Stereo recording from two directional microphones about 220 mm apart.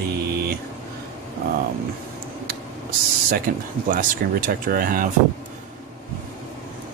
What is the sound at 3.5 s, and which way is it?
Speech, 40° right (ahead or behind).